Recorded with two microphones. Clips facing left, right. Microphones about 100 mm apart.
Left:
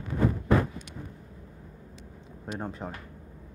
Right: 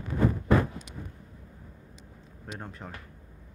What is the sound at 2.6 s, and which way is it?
Speech, 20° left (ahead or behind).